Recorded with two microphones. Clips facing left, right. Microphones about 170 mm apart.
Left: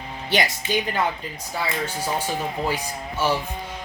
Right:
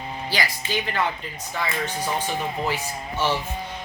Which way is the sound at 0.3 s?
20° left (ahead or behind).